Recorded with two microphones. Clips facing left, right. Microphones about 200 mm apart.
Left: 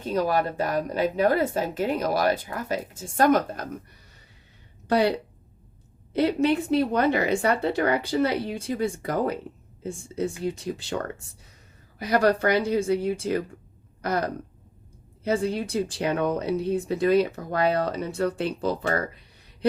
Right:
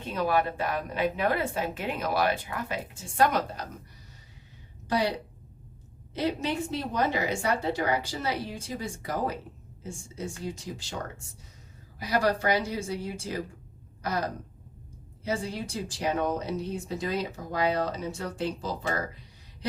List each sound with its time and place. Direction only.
0.0 s a woman's voice: 40° left (ahead or behind)
4.9 s speech: 60° left (ahead or behind)
6.1 s speech: 60° left (ahead or behind)